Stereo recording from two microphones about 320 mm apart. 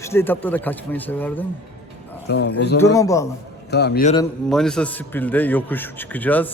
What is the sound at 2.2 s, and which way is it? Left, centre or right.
Speech, left.